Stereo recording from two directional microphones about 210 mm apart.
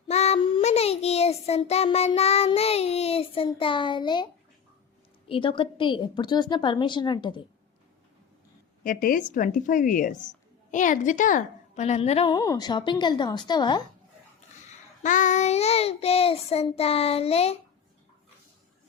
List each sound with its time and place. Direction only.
0.1 s child singing: 30° left (ahead or behind)
5.3 s a woman's voice: 25° left (ahead or behind)
8.8 s a woman's voice: 40° left (ahead or behind); by 13.8 s 20° left (ahead or behind)
15.0 s a woman's voice: 35° left (ahead or behind)